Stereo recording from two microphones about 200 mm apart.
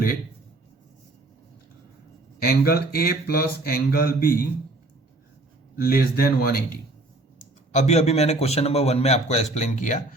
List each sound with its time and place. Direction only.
2.4 s speech: 50° left (ahead or behind)
5.7 s speech: 50° left (ahead or behind)
7.7 s a man's voice: 35° left (ahead or behind)